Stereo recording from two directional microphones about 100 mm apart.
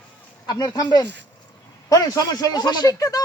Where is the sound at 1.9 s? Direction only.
35° left (ahead or behind).